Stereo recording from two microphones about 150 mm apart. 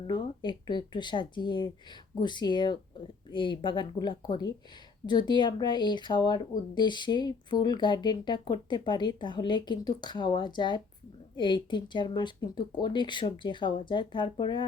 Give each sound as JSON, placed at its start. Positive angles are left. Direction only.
{"t": 0.1, "sound": "speech", "side_deg": 30}